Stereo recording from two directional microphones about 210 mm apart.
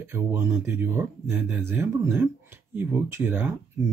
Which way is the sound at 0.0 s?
10° right (ahead or behind).